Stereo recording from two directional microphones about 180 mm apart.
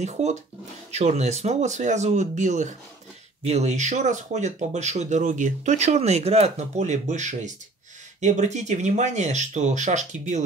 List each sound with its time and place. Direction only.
0.0 s speech: 40° right (ahead or behind)